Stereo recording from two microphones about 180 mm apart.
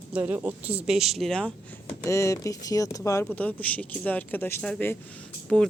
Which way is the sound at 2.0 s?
15° left (ahead or behind).